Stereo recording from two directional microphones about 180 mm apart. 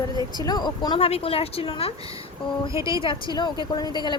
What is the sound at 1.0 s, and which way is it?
A woman's voice, 35° left (ahead or behind).